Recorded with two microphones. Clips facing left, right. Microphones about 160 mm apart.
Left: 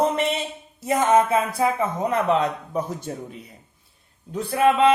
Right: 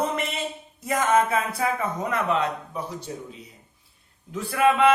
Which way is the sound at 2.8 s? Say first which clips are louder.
Left 6 dB; 45° left (ahead or behind).